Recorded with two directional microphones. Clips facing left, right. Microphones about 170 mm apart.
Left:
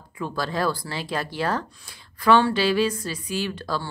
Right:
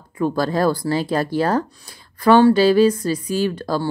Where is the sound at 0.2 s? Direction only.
45° right (ahead or behind).